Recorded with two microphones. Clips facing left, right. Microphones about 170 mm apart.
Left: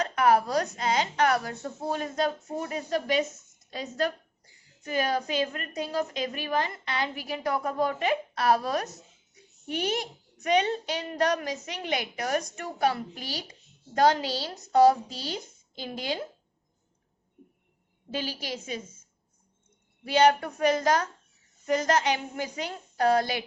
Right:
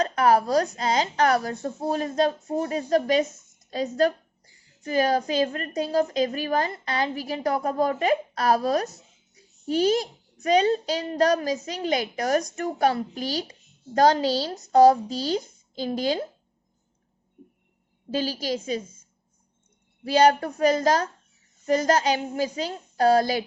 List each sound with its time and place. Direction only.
0.0 s a woman's voice: 35° right (ahead or behind)
18.1 s a woman's voice: 40° right (ahead or behind)
20.1 s a woman's voice: 35° right (ahead or behind)